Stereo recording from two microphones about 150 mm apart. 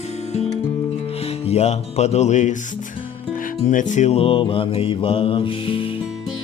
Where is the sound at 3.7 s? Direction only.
55° left (ahead or behind); by 5.9 s 35° left (ahead or behind).